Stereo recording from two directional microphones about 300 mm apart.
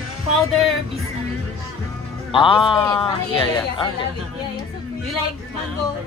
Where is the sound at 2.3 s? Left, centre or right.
Centre.